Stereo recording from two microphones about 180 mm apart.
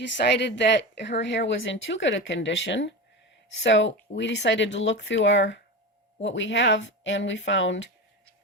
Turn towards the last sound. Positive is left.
turn(degrees=90)